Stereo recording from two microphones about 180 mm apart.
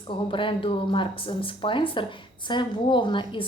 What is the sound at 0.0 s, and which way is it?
Speech, 30° left (ahead or behind).